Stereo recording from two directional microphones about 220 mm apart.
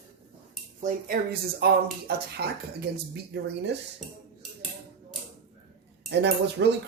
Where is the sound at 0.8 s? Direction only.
40° right (ahead or behind).